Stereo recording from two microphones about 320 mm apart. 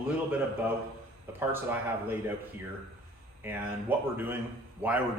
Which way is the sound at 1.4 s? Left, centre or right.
Centre.